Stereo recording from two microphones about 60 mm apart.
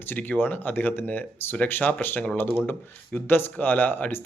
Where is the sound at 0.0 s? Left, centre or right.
Left.